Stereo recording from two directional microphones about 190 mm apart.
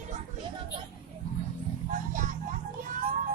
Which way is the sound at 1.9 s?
45° right (ahead or behind).